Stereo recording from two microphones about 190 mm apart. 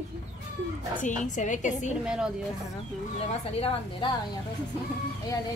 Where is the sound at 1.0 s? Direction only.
40° left (ahead or behind).